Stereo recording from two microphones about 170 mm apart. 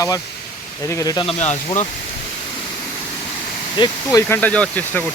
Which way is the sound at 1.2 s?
40° left (ahead or behind).